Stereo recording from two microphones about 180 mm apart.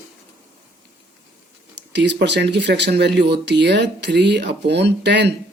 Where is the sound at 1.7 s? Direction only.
75° right (ahead or behind).